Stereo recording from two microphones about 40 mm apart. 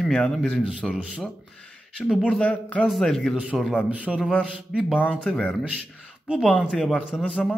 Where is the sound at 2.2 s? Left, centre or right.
Left.